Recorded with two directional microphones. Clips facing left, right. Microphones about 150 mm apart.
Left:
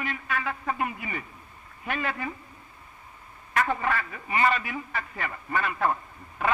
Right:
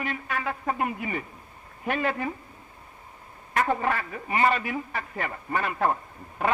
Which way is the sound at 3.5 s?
30° right (ahead or behind).